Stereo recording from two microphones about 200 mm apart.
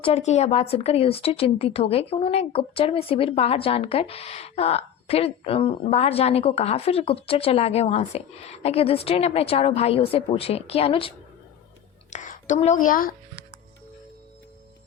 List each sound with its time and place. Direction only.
0.0 s speech: 35° left (ahead or behind)
12.1 s a woman's voice: 40° left (ahead or behind)